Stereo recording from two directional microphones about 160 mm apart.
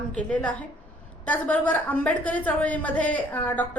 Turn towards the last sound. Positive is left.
turn(degrees=10)  # may be behind; listen again after turning